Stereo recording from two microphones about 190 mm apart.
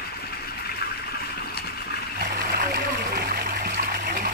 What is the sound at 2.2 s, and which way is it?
Splash, 55° right (ahead or behind).